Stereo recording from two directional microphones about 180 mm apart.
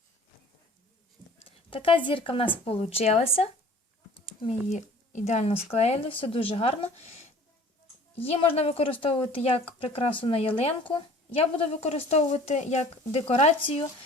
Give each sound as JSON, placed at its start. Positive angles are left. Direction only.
{"t": 1.5, "sound": "a sound", "side_deg": 30}
{"t": 2.0, "sound": "a woman's voice", "side_deg": 30}
{"t": 8.1, "sound": "a woman's voice", "side_deg": 35}